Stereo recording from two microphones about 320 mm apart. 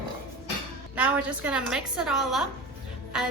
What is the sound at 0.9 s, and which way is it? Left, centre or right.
A woman's voice, centre.